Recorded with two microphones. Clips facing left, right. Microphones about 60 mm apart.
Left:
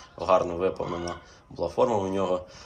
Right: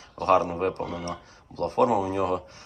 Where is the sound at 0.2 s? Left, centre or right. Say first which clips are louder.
Right 1 dB; right.